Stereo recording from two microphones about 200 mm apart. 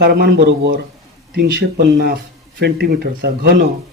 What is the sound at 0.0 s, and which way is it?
Speech, 55° right (ahead or behind).